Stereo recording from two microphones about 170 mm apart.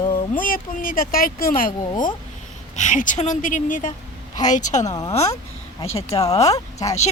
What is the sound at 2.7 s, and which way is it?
A woman's voice, 45° left (ahead or behind).